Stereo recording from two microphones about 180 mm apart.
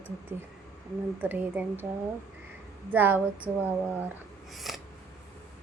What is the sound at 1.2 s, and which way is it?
Speech, 10° right (ahead or behind).